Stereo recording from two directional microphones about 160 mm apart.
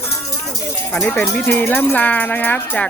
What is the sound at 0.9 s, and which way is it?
Speech, 15° left (ahead or behind).